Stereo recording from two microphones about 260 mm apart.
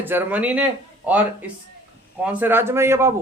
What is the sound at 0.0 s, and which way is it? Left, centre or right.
Speech, centre.